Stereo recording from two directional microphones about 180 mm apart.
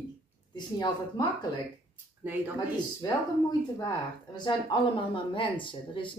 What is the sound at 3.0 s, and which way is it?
Speech, 20° left (ahead or behind).